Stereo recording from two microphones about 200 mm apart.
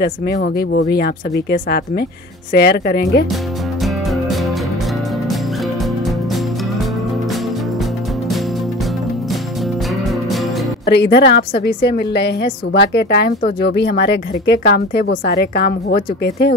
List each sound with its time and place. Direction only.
0.0 s speech: 50° left (ahead or behind)
10.9 s speech: 55° left (ahead or behind)